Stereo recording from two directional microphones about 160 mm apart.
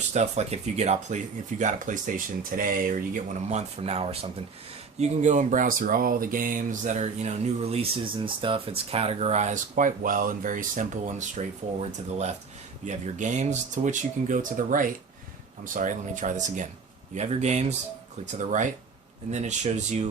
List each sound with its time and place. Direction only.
0.1 s speech: 40° right (ahead or behind)